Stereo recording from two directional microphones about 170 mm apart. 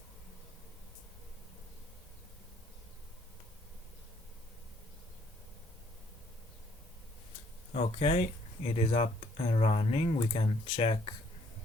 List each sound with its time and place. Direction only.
7.7 s speech: 40° left (ahead or behind)